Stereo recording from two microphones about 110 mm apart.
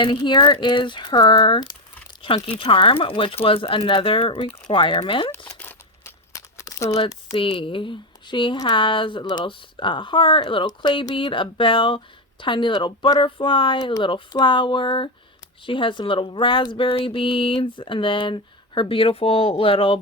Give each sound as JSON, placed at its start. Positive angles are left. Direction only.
{"t": 0.0, "sound": "speech", "side_deg": 45}
{"t": 2.2, "sound": "speech", "side_deg": 55}
{"t": 6.6, "sound": "crumpling", "side_deg": 30}
{"t": 7.3, "sound": "speech", "side_deg": 50}